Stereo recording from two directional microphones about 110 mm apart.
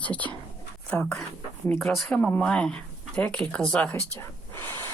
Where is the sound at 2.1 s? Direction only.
10° left (ahead or behind).